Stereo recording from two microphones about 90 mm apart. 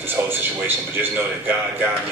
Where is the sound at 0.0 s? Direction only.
25° right (ahead or behind).